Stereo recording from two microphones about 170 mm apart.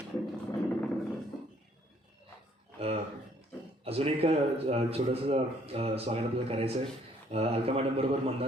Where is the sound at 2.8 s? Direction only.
35° right (ahead or behind).